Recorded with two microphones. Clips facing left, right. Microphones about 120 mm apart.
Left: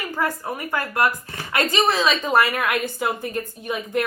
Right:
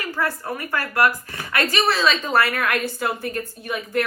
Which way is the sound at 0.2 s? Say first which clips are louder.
Left 1 dB; 15° left (ahead or behind).